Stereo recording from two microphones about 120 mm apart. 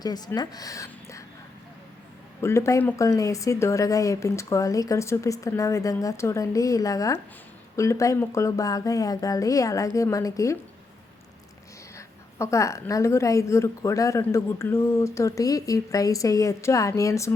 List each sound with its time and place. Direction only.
0.0 s speech: 35° left (ahead or behind)
2.4 s speech: 25° left (ahead or behind)
11.9 s a sound: 25° left (ahead or behind)
12.9 s speech: 25° left (ahead or behind)